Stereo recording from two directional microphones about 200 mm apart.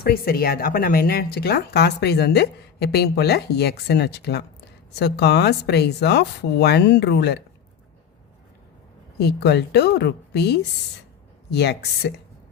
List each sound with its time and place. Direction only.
0.0 s speech: 50° left (ahead or behind)
9.1 s speech: 55° left (ahead or behind)